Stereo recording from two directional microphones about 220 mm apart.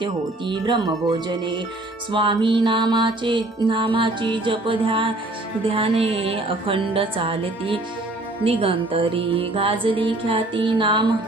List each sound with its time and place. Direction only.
0.0 s music: 20° right (ahead or behind)
2.1 s music: 20° right (ahead or behind)